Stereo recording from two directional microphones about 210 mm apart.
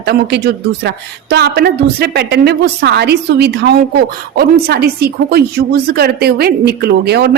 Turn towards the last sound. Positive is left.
turn(degrees=-50)  # may be behind; listen again after turning